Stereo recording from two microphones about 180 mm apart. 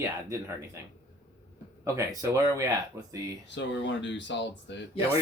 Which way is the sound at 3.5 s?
85° left.